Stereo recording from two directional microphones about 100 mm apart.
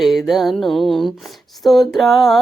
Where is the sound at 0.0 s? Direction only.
Centre (ahead or behind).